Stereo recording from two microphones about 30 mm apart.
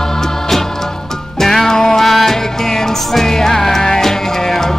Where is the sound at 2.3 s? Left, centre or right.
Centre.